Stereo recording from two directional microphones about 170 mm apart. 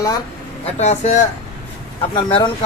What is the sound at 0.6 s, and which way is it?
Speech, 40° left (ahead or behind).